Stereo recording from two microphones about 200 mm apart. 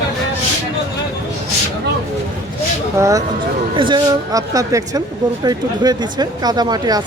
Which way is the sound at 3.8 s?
20° right (ahead or behind).